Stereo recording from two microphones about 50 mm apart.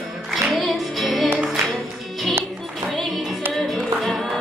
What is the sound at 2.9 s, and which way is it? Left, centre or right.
Music, centre.